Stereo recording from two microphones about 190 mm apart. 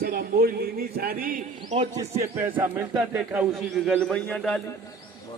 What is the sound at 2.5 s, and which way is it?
Speech, 25° right (ahead or behind).